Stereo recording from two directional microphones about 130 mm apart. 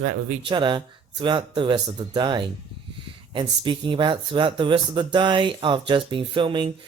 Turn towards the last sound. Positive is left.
turn(degrees=-40)  # may be behind; listen again after turning